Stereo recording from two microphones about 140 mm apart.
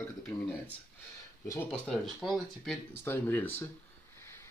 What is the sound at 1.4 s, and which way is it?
Speech, 20° left (ahead or behind).